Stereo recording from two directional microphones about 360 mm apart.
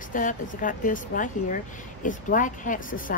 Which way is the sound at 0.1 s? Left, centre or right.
Left.